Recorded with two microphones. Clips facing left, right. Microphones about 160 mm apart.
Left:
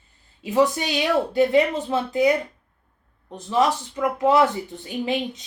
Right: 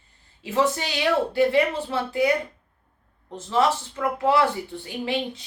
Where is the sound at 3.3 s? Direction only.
15° left (ahead or behind).